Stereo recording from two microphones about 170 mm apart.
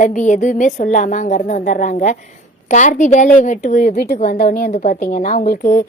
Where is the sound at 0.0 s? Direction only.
45° left (ahead or behind).